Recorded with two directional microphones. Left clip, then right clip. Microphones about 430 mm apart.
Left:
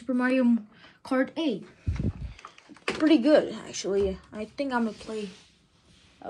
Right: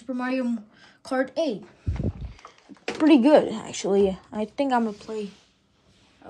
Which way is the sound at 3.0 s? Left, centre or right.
Centre.